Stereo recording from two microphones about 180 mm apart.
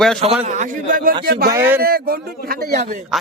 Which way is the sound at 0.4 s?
40° right (ahead or behind).